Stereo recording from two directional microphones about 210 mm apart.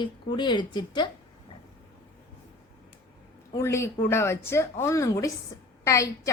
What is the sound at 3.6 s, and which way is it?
Speech, 10° left (ahead or behind).